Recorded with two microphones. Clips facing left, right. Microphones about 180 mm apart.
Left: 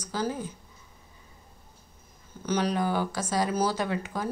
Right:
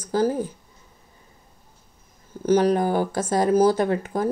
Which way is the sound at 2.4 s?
50° right (ahead or behind).